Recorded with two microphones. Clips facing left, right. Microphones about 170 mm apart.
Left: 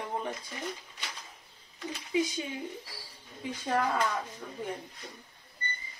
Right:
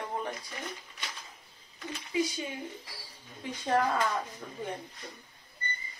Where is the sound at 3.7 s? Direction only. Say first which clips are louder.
Right 2 dB; 10° right (ahead or behind).